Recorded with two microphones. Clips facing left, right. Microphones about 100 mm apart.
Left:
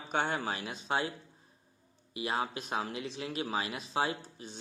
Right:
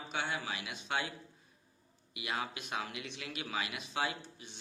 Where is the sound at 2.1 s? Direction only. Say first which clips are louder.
Left 5 dB; 35° left (ahead or behind).